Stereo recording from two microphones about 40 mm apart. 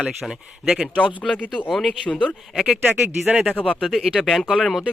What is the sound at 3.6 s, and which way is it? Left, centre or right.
Speech, left.